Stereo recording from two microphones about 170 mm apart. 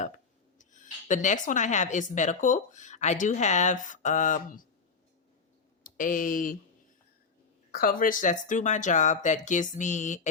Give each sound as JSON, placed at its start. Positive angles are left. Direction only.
{"t": 0.6, "sound": "speech", "side_deg": 50}
{"t": 5.8, "sound": "speech", "side_deg": 50}
{"t": 7.7, "sound": "speech", "side_deg": 55}